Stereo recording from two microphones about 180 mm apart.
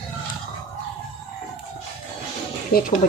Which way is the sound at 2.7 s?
55° left (ahead or behind).